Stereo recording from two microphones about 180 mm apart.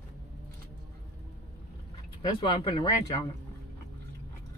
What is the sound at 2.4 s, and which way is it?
Speech, 30° left (ahead or behind).